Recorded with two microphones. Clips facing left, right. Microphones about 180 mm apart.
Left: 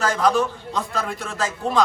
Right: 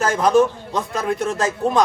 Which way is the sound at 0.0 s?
20° right (ahead or behind).